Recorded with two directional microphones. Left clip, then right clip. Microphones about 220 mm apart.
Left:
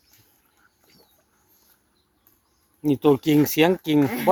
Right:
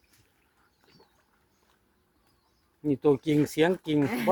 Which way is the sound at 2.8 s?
35° left (ahead or behind).